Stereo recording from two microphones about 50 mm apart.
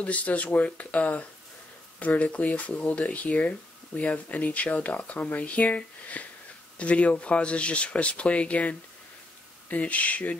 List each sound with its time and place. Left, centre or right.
0.0 s speech: left
6.2 s wheeze: left
6.8 s speech: left